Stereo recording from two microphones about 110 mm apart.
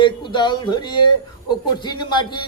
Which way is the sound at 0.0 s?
45° left (ahead or behind).